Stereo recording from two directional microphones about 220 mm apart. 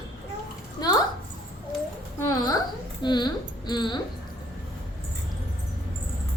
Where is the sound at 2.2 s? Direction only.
15° left (ahead or behind).